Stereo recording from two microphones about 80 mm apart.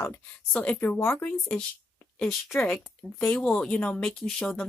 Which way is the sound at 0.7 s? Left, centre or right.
Left.